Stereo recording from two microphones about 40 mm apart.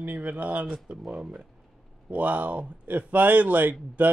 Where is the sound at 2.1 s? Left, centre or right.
Right.